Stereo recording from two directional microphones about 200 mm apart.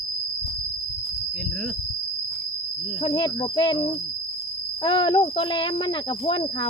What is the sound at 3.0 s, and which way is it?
Speech, 25° left (ahead or behind).